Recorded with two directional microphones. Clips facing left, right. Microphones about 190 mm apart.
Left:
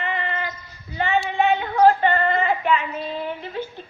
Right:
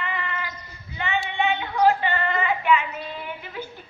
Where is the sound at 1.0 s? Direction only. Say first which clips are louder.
Left 5 dB; 40° left (ahead or behind).